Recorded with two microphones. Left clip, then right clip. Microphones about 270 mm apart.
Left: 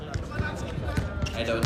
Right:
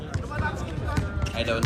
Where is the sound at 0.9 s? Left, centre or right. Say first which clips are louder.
Right 3 dB; right.